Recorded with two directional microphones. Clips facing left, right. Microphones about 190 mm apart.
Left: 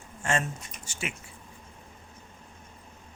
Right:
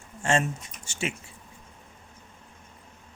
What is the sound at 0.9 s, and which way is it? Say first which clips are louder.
Speech: right 5 dB; 25° right (ahead or behind).